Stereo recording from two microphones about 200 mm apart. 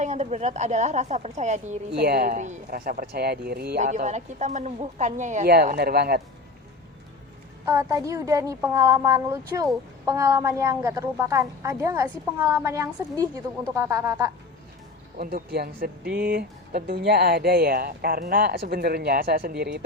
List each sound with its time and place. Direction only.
0.0 s speech: 35° right (ahead or behind)
1.9 s speech: 50° right (ahead or behind)
3.8 s speech: 40° right (ahead or behind)
5.5 s speech: 50° right (ahead or behind)
7.6 s a woman's voice: 15° right (ahead or behind)
15.2 s speech: 50° right (ahead or behind)